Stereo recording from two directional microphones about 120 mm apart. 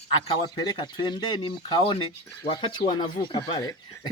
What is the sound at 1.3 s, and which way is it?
Speech, 40° left (ahead or behind).